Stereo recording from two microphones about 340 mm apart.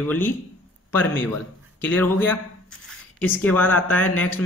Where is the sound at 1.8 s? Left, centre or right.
Centre.